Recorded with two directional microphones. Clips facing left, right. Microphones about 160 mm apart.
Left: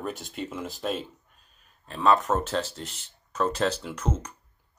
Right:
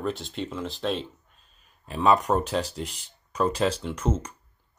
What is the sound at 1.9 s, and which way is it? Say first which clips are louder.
Speech: right 1 dB; 5° right (ahead or behind).